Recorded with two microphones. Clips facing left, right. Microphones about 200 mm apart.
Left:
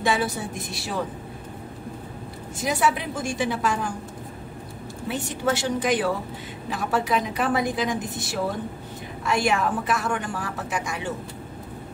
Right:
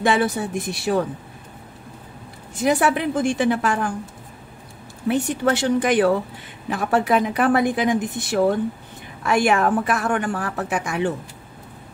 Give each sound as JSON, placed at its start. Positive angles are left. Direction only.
{"t": 0.0, "sound": "a woman's voice", "side_deg": -55}
{"t": 2.6, "sound": "a woman's voice", "side_deg": -55}
{"t": 5.0, "sound": "a woman's voice", "side_deg": -55}